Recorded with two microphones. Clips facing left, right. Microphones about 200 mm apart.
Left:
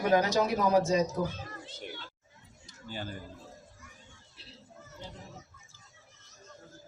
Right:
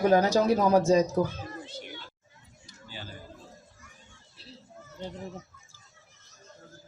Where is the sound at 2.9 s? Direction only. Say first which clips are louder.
Left 5 dB; 50° left (ahead or behind).